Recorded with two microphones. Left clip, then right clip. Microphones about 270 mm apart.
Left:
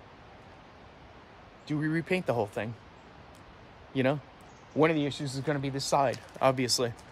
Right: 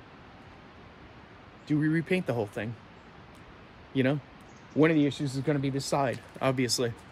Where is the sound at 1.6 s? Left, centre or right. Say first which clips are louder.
Right 3 dB; centre.